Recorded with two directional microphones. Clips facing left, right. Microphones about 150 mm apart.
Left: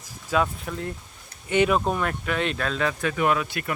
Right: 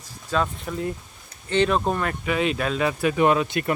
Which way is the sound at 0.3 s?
5° left (ahead or behind).